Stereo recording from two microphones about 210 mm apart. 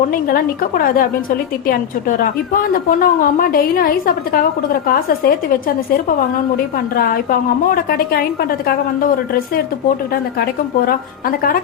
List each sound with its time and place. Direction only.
0.1 s a woman's voice: 45° left (ahead or behind)
10.1 s a woman's voice: 45° left (ahead or behind)